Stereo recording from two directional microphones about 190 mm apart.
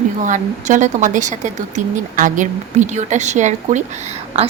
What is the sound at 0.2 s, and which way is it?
Speech, 40° right (ahead or behind).